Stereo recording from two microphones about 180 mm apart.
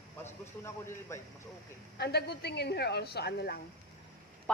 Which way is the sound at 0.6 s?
15° left (ahead or behind).